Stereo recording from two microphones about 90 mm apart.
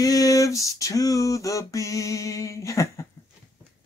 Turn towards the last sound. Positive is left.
turn(degrees=35)  # may be behind; listen again after turning